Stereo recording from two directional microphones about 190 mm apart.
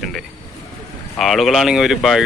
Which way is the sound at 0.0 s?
Centre (ahead or behind).